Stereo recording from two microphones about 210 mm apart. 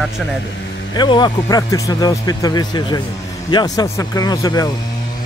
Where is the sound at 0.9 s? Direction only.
20° left (ahead or behind).